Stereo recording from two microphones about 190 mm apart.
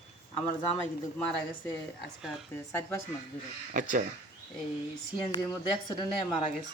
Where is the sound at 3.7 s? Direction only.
45° right (ahead or behind).